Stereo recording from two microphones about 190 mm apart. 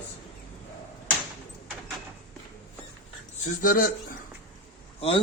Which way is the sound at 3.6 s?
45° left (ahead or behind).